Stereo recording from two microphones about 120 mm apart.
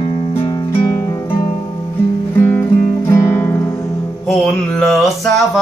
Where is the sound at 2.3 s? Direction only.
20° left (ahead or behind).